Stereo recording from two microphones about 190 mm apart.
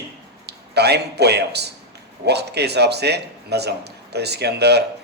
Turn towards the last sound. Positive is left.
turn(degrees=-60)  # may be behind; listen again after turning